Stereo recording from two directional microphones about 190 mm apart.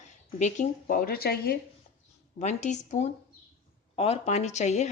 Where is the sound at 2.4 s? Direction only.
35° left (ahead or behind).